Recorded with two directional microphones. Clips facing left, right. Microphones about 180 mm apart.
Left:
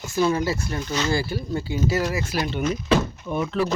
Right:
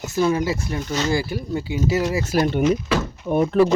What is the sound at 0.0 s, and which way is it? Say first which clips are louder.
Speech: right 2 dB; 20° right (ahead or behind).